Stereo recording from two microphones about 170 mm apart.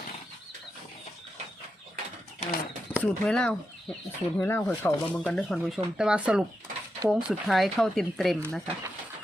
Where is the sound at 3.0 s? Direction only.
5° left (ahead or behind).